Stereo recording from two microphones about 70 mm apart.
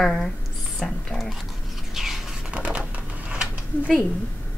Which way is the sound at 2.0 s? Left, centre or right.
Centre.